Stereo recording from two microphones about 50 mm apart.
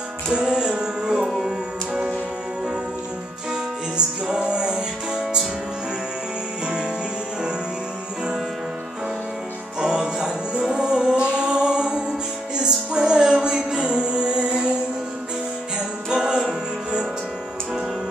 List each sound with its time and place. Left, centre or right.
0.3 s music: centre
3.9 s music: centre
9.8 s music: centre
16.1 s music: centre